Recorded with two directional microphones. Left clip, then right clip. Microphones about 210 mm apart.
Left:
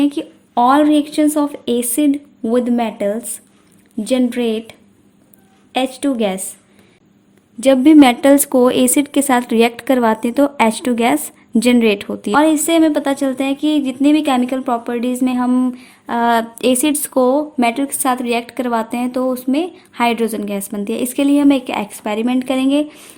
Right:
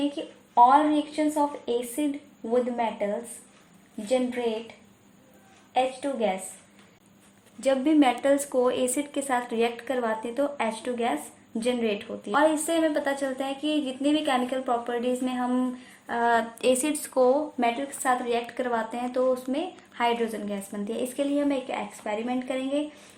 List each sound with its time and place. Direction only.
0.5 s speech: 45° left (ahead or behind)
5.7 s speech: 50° left (ahead or behind)
7.6 s a woman's voice: 35° left (ahead or behind)
12.3 s a woman's voice: 30° left (ahead or behind)